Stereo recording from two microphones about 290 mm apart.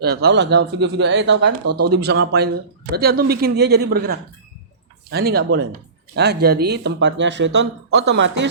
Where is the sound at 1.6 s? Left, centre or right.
Right.